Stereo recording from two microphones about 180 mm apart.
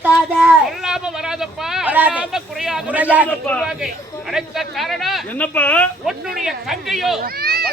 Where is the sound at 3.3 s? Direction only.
10° left (ahead or behind).